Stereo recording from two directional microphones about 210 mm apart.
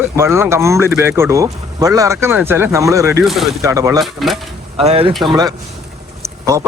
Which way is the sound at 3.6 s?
15° right (ahead or behind).